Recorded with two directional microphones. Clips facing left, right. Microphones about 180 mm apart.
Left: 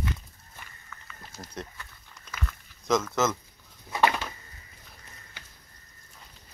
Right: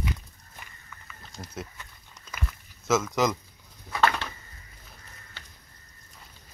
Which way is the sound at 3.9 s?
15° left (ahead or behind).